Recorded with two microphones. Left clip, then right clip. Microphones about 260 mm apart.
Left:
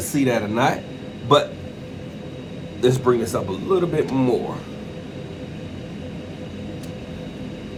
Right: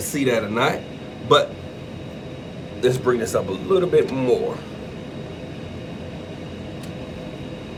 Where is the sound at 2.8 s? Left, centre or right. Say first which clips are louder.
Left 1 dB; centre.